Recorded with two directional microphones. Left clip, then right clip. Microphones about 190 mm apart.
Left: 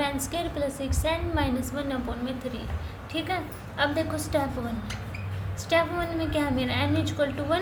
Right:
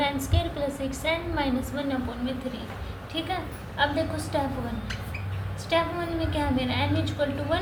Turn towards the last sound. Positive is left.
turn(degrees=35)  # may be behind; listen again after turning